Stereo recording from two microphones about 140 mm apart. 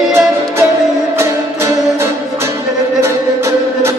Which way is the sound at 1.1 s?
20° right (ahead or behind).